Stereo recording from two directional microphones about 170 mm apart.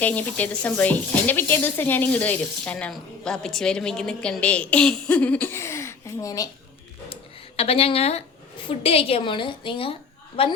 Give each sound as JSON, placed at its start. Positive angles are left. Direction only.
{"t": 0.0, "sound": "speech", "side_deg": 10}
{"t": 7.1, "sound": "a woman's voice", "side_deg": 35}